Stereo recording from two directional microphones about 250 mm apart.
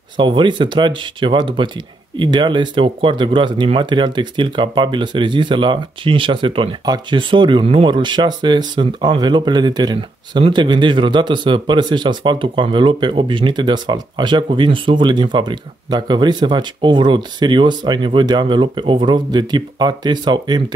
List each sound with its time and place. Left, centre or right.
0.2 s speech: centre